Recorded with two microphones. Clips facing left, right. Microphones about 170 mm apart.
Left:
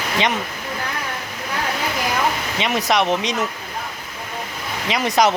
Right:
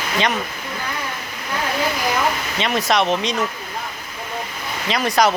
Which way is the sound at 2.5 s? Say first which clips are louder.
Even; 15° left (ahead or behind).